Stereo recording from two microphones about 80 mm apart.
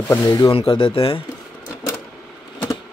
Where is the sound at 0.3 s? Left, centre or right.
Left.